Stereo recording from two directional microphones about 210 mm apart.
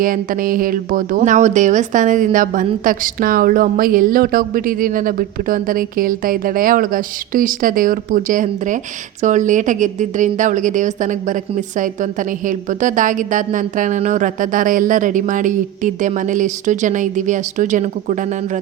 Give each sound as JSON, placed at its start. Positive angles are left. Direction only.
{"t": 0.0, "sound": "speech", "side_deg": -40}